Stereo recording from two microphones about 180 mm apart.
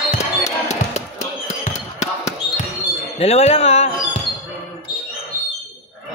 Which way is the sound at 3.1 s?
35° left (ahead or behind).